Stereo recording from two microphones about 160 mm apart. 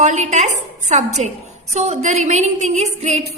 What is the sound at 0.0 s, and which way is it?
A woman's voice, 50° right (ahead or behind).